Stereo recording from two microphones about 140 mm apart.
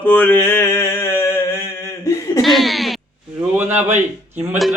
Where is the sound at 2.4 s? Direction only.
Centre (ahead or behind).